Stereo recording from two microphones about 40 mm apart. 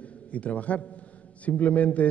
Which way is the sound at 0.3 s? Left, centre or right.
Left.